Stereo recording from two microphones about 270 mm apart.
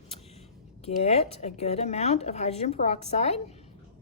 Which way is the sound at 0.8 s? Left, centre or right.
Left.